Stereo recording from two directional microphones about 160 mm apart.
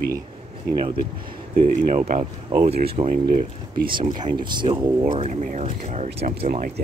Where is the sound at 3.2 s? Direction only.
65° right (ahead or behind).